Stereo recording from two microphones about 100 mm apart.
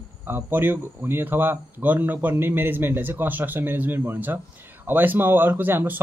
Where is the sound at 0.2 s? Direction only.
20° right (ahead or behind).